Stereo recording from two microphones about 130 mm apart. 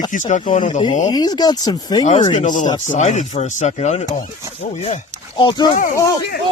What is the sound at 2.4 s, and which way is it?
Speech, 70° left (ahead or behind).